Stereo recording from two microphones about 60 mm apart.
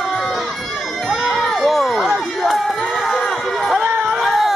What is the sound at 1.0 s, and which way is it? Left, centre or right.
Crowd, centre.